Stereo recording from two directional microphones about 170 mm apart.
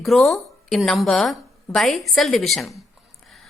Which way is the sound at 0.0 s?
Centre (ahead or behind).